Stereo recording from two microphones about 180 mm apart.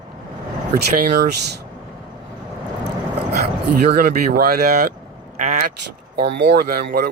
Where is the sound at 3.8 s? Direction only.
60° right (ahead or behind).